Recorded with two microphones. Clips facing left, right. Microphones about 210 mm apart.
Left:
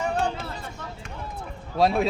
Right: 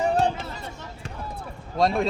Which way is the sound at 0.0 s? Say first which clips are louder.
Right 4 dB; 35° right (ahead or behind).